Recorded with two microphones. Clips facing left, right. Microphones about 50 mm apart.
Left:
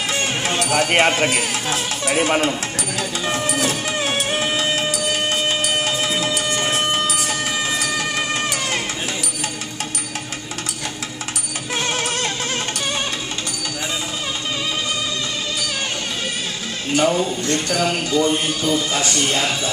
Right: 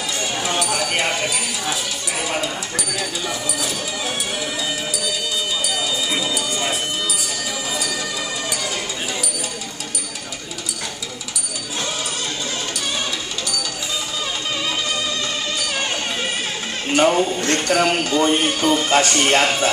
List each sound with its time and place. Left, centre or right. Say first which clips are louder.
0.1 s speech: even; left
3.0 s music: left 6 dB; left
6.2 s a sound: left 2 dB; left
7.8 s music: left 3 dB; left
11.8 s music: left 4 dB; left
16.9 s speech: right 2 dB; right